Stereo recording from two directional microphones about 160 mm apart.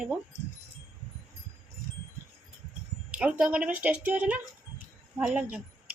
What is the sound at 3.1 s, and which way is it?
Speech, 5° right (ahead or behind).